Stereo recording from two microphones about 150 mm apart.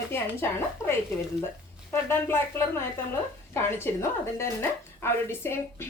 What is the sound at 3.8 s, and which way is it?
A woman's voice, 15° left (ahead or behind).